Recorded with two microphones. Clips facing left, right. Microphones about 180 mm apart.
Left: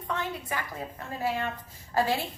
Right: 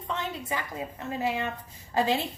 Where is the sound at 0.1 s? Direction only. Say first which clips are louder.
Even; 20° right (ahead or behind).